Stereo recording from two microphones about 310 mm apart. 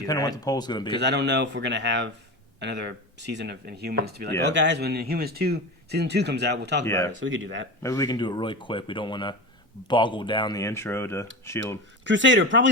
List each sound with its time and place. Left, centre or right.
0.0 s speech: centre
1.0 s speech: right
6.8 s speech: centre
7.2 s speech: right
7.8 s speech: centre
12.0 s speech: right